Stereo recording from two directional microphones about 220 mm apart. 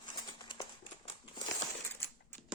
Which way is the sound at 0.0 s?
20° left (ahead or behind).